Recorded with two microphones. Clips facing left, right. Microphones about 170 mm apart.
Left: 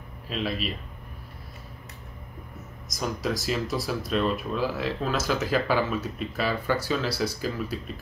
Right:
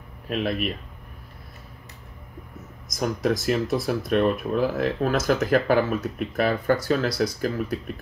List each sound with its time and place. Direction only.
0.3 s speech: 55° right (ahead or behind)
3.0 s speech: 55° right (ahead or behind)